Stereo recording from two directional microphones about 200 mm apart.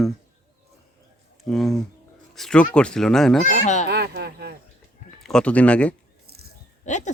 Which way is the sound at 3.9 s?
55° right (ahead or behind).